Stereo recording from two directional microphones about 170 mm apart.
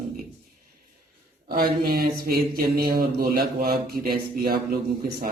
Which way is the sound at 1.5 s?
65° right (ahead or behind).